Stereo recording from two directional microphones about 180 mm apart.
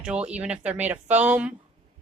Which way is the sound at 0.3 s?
5° right (ahead or behind).